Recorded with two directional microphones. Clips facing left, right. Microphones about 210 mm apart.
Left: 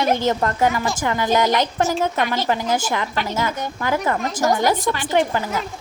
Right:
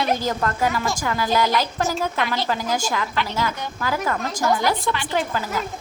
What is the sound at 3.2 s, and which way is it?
Speech, 45° left (ahead or behind).